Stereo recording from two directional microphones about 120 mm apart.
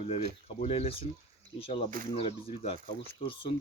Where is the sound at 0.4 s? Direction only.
55° left (ahead or behind).